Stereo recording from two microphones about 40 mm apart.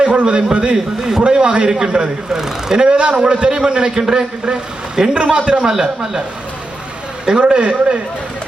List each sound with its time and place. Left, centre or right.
0.0 s a man's voice: right
5.6 s speech: centre
7.3 s a man's voice: right